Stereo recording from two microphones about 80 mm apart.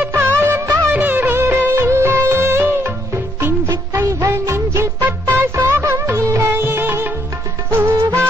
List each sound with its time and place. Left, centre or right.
0.1 s music of bollywood: right
3.9 s music: right
6.6 s music: right